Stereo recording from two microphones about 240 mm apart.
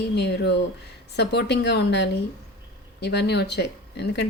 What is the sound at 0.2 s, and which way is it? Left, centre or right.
A woman's voice, left.